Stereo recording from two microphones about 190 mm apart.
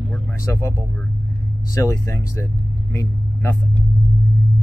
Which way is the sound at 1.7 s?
20° left (ahead or behind).